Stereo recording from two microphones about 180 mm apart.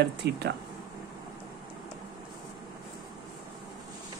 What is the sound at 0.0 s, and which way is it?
Speech, 70° right (ahead or behind).